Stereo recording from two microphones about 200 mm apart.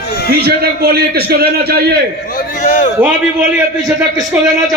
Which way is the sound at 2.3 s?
40° left (ahead or behind).